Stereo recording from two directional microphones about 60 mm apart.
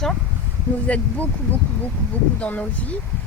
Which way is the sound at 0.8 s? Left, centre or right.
Left.